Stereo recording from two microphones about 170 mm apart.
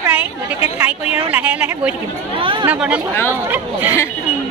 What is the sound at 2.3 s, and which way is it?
Speech, 30° right (ahead or behind).